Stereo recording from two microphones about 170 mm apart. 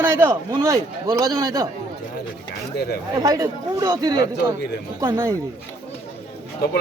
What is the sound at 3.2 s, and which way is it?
A man's voice, 20° right (ahead or behind).